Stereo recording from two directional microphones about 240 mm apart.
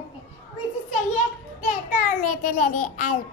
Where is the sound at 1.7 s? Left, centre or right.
Left.